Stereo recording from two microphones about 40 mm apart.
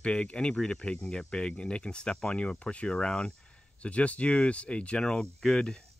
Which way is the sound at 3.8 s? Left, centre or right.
Left.